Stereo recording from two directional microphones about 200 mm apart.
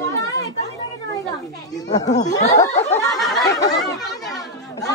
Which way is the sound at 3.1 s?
Centre (ahead or behind).